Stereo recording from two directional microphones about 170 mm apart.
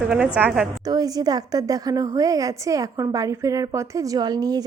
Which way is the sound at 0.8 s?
20° right (ahead or behind).